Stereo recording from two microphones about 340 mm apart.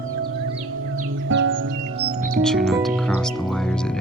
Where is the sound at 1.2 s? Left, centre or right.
Right.